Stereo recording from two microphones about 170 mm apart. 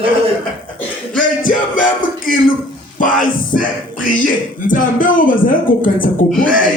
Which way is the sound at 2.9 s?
50° left (ahead or behind).